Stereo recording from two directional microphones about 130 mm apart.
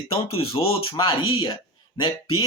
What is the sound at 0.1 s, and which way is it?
Speech, 45° left (ahead or behind).